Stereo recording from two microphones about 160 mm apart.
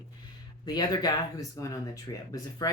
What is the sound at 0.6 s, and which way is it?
Speech, 25° left (ahead or behind).